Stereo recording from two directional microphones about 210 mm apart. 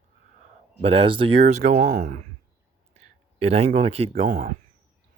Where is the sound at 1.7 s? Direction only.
45° right (ahead or behind).